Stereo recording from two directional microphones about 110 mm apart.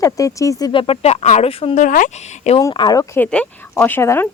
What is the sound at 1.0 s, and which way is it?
Speech, 75° left (ahead or behind).